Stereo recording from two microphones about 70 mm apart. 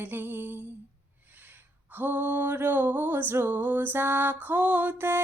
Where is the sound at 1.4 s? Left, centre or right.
Right.